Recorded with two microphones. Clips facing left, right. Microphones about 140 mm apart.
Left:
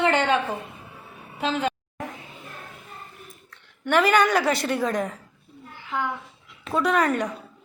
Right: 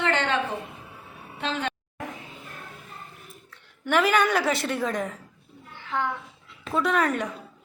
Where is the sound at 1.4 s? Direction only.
5° left (ahead or behind).